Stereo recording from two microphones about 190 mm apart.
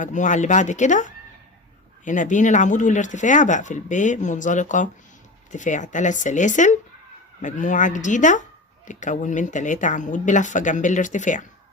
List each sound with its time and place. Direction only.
0.0 s speech: 40° left (ahead or behind)